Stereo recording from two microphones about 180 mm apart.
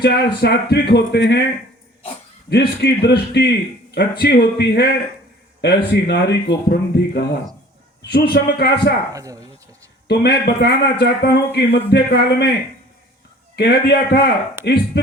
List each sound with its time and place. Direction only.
0.0 s speech: 65° left (ahead or behind)
2.5 s speech: 65° left (ahead or behind)
9.1 s speech: 20° right (ahead or behind)
10.1 s speech: 65° left (ahead or behind)
13.6 s speech: 70° left (ahead or behind)